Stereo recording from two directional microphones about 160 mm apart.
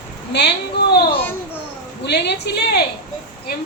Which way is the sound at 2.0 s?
90° left.